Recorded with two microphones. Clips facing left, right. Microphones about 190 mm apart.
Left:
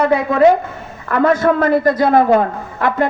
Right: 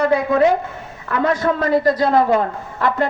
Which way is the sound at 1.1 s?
55° left (ahead or behind).